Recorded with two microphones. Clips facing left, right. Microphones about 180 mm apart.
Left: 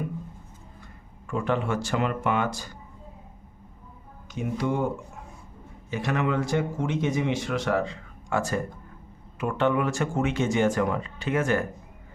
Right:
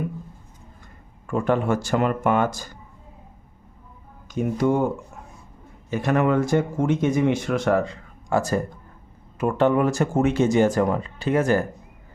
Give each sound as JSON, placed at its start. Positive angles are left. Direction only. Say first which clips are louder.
{"t": 1.3, "sound": "speech", "louder": "right 5 dB", "side_deg": -45}
{"t": 4.4, "sound": "speech", "louder": "right 6 dB", "side_deg": -45}
{"t": 5.9, "sound": "speech", "louder": "right 6 dB", "side_deg": -50}